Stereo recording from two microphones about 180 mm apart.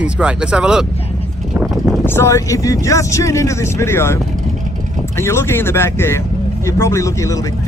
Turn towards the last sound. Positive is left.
turn(degrees=15)  # may be behind; listen again after turning